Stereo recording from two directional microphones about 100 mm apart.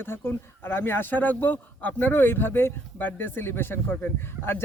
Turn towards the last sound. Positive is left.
turn(degrees=20)  # may be behind; listen again after turning